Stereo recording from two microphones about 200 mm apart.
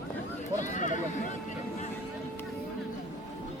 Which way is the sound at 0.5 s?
40° left (ahead or behind).